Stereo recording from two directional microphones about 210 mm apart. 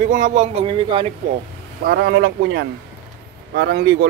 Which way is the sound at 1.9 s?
50° right (ahead or behind).